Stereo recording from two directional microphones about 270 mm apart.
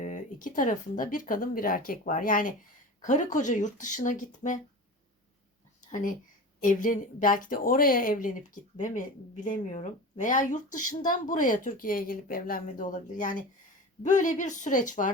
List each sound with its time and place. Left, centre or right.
0.0 s speech: left
5.8 s speech: left